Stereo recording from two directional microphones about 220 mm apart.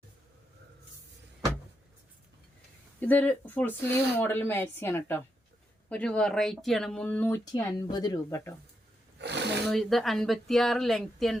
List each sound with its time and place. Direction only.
3.0 s speech: 5° left (ahead or behind)
9.1 s a sound: 50° right (ahead or behind)
9.6 s speech: centre (ahead or behind)